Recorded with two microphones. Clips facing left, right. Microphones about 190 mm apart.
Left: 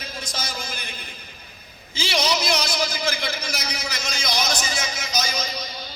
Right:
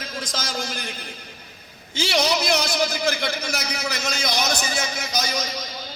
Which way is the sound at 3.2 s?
65° right (ahead or behind).